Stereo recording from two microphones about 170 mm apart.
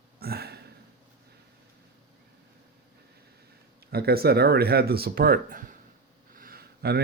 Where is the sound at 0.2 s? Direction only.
65° right (ahead or behind).